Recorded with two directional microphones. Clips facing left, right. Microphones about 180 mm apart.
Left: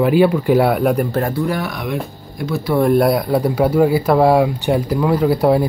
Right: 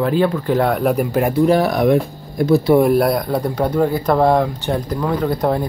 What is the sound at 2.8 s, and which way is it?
Speech, centre (ahead or behind).